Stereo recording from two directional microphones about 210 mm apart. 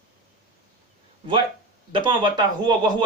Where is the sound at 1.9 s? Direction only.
20° right (ahead or behind).